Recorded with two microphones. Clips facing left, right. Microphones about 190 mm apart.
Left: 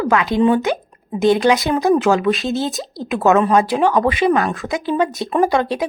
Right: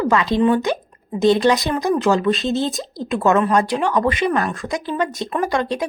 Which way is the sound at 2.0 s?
5° left (ahead or behind).